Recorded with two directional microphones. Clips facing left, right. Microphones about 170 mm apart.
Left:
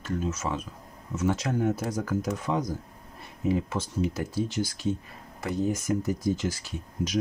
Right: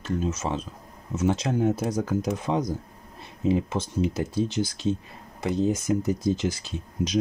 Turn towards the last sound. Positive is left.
turn(degrees=-20)  # may be behind; listen again after turning